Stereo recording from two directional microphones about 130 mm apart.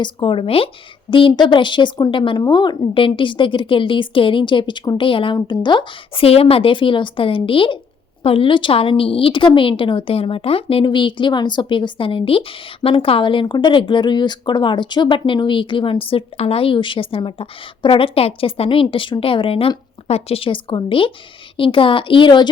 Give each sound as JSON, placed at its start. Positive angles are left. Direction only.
{"t": 0.0, "sound": "a woman's voice", "side_deg": 40}